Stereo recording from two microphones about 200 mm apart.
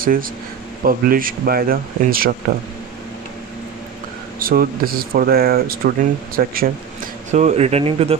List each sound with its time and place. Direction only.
0.0 s speech: 45° right (ahead or behind)
4.4 s speech: 45° right (ahead or behind)
7.3 s speech: 35° right (ahead or behind)